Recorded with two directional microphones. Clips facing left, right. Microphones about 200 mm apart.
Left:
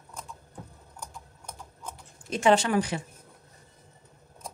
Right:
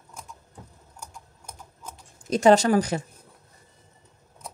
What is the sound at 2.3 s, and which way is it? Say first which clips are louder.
Speech: right 5 dB; 40° right (ahead or behind).